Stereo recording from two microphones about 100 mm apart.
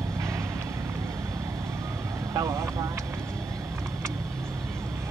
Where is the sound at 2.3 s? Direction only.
30° right (ahead or behind).